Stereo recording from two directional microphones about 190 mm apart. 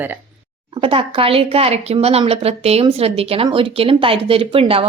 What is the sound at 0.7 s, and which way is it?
A woman's voice, 30° right (ahead or behind).